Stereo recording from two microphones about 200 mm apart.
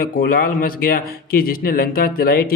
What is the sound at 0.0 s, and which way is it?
Speech, 45° left (ahead or behind).